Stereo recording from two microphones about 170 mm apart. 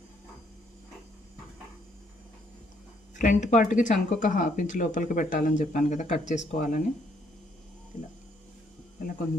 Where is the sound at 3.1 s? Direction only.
45° left (ahead or behind).